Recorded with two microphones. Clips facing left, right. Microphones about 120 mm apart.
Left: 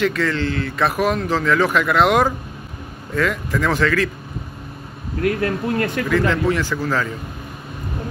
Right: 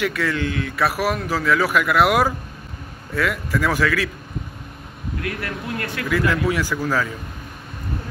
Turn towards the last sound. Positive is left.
turn(degrees=-10)  # may be behind; listen again after turning